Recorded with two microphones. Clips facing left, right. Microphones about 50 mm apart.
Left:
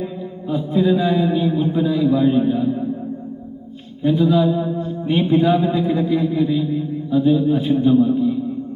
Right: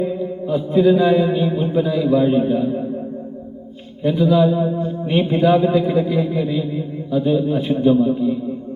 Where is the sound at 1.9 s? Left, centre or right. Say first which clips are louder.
Even; centre.